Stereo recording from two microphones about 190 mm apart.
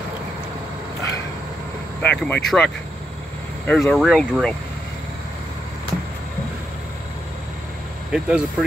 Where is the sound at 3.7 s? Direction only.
5° left (ahead or behind).